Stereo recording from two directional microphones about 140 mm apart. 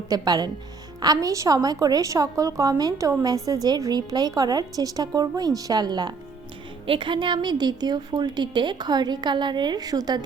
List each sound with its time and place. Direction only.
0.1 s a woman's voice: 30° right (ahead or behind)